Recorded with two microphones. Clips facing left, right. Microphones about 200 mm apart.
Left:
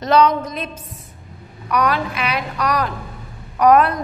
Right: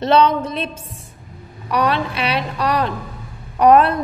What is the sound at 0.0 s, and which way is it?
A woman's voice, 30° right (ahead or behind).